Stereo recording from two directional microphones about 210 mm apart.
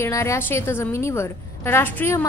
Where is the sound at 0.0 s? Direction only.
15° left (ahead or behind).